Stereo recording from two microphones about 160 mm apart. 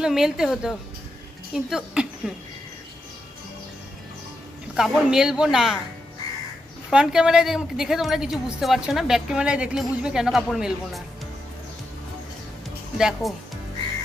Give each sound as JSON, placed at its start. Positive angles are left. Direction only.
{"t": 0.0, "sound": "a woman's voice", "side_deg": -5}
{"t": 4.7, "sound": "a woman's voice", "side_deg": -5}
{"t": 6.9, "sound": "a woman's voice", "side_deg": -5}
{"t": 12.9, "sound": "speech", "side_deg": -5}